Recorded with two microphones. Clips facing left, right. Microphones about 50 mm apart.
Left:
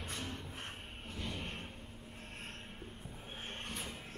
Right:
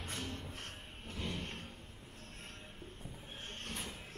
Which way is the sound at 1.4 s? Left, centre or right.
Centre.